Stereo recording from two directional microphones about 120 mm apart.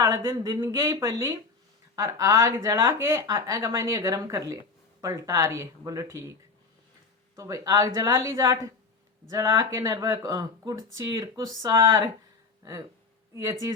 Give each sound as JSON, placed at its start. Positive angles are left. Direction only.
{"t": 0.0, "sound": "speech", "side_deg": -25}
{"t": 7.3, "sound": "speech", "side_deg": -30}
{"t": 13.3, "sound": "speech", "side_deg": -25}